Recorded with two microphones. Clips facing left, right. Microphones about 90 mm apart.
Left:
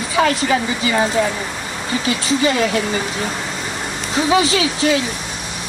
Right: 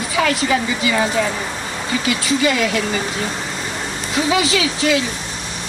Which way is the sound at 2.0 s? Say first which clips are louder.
Left 1 dB; 30° left (ahead or behind).